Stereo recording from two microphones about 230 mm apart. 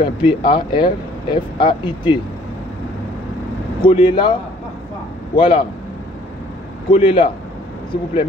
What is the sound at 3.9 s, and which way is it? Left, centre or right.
Speech, left.